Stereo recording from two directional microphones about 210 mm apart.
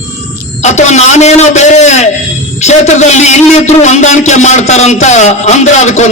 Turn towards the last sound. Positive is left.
turn(degrees=35)  # may be behind; listen again after turning